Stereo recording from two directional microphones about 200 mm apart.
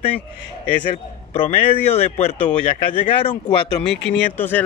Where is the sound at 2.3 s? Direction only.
10° left (ahead or behind).